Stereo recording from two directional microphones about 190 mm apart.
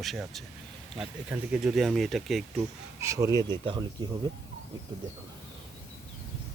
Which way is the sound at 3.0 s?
15° right (ahead or behind).